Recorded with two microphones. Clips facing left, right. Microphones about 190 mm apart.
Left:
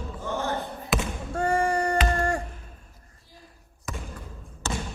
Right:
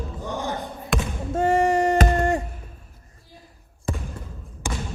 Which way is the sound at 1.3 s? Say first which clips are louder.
Right 5 dB; 20° right (ahead or behind).